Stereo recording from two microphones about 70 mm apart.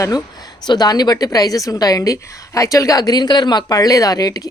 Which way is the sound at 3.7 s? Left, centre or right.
Left.